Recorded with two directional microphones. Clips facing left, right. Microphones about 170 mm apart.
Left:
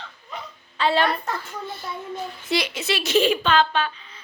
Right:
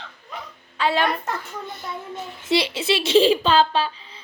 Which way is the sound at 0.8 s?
10° right (ahead or behind).